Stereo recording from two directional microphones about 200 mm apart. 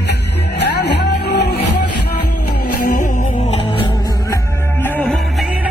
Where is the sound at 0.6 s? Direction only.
55° left (ahead or behind).